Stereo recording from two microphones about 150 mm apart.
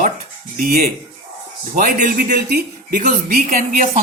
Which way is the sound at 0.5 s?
75° right (ahead or behind).